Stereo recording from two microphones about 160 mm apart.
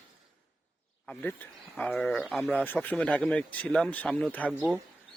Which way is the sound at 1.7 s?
5° left (ahead or behind).